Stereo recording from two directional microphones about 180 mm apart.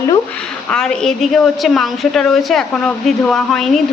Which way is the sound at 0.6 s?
5° left (ahead or behind).